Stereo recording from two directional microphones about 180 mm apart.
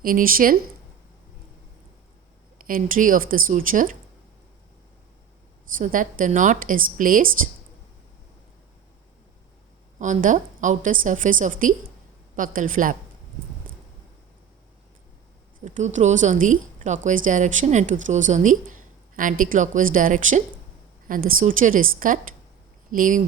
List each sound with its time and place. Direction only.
0.0 s a woman's voice: 50° right (ahead or behind)
2.6 s a woman's voice: 50° right (ahead or behind)
5.7 s a woman's voice: 45° right (ahead or behind)
10.0 s a woman's voice: 45° right (ahead or behind)
15.6 s a woman's voice: 40° right (ahead or behind)